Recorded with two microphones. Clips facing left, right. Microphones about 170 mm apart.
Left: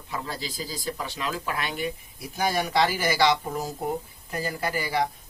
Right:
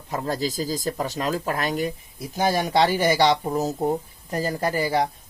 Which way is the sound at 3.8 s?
35° right (ahead or behind).